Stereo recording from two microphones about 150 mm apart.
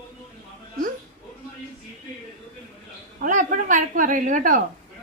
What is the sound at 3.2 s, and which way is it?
A woman's voice, 60° right (ahead or behind).